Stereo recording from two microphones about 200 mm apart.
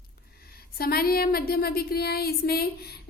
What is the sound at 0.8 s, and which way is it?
A woman's voice, 50° left (ahead or behind).